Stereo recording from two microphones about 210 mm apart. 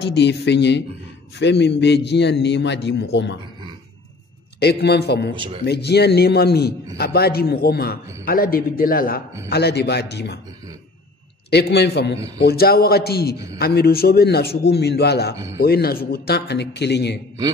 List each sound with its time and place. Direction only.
0.0 s a man's voice: 55° left (ahead or behind)
4.6 s a man's voice: 50° left (ahead or behind)
5.3 s speech: 25° right (ahead or behind)
5.7 s a man's voice: 50° left (ahead or behind)
11.5 s a man's voice: 50° left (ahead or behind)